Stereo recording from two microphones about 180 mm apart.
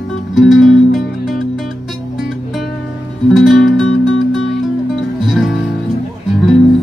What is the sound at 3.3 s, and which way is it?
Music, centre (ahead or behind).